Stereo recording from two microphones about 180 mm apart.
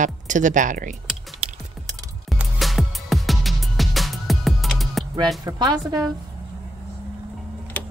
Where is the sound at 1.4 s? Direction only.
35° right (ahead or behind).